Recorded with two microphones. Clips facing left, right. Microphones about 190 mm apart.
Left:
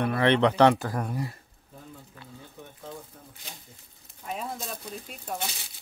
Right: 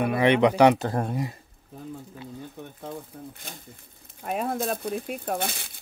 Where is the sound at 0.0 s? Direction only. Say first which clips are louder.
Right 2 dB; 15° right (ahead or behind).